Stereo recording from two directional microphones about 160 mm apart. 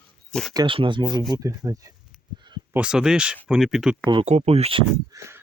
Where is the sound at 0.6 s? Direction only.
30° right (ahead or behind).